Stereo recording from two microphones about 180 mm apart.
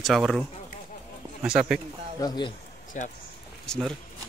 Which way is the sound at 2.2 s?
25° left (ahead or behind).